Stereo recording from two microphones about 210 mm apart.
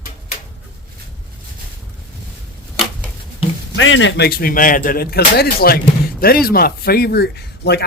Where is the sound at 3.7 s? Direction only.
60° left (ahead or behind).